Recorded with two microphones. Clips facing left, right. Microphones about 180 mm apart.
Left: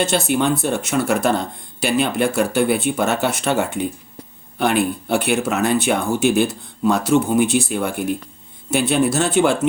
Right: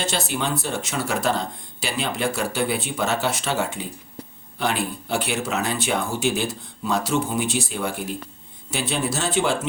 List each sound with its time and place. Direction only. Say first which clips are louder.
0.3 s speech: left 8 dB; 55° left (ahead or behind)